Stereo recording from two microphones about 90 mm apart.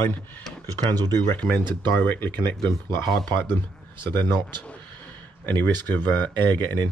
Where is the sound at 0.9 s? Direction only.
50° right (ahead or behind).